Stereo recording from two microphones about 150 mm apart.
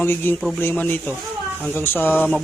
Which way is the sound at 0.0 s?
15° left (ahead or behind).